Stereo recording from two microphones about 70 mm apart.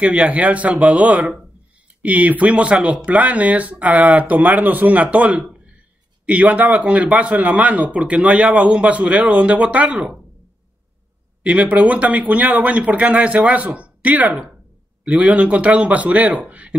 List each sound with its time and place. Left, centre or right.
0.0 s speech: centre
5.4 s a sound: centre
6.2 s speech: right
11.4 s speech: centre